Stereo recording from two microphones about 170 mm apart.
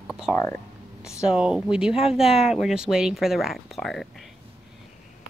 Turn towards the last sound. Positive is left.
turn(degrees=0)  # may be behind; listen again after turning